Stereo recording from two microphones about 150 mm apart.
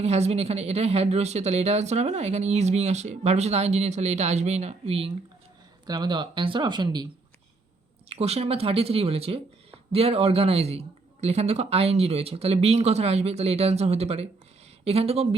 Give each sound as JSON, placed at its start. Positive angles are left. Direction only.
{"t": 0.0, "sound": "speech", "side_deg": -45}
{"t": 5.8, "sound": "speech", "side_deg": -30}
{"t": 8.1, "sound": "speech", "side_deg": -40}